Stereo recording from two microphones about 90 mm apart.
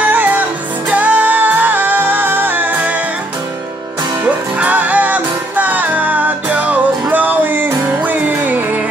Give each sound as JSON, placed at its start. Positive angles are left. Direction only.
{"t": 0.1, "sound": "music", "side_deg": -20}
{"t": 4.2, "sound": "music", "side_deg": -15}